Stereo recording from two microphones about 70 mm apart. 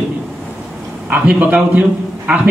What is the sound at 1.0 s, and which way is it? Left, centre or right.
A man's voice, centre.